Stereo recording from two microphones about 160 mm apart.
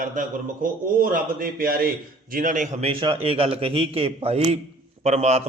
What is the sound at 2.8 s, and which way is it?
A man's voice, 35° right (ahead or behind).